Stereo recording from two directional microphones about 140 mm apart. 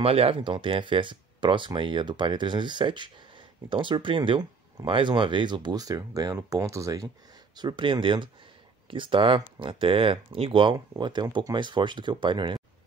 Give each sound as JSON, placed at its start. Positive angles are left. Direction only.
{"t": 0.0, "sound": "speech", "side_deg": -45}